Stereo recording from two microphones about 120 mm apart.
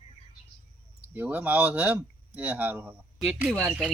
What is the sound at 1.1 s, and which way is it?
Speech, 15° right (ahead or behind).